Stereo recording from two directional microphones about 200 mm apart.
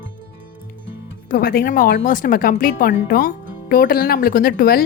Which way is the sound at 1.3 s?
50° left (ahead or behind).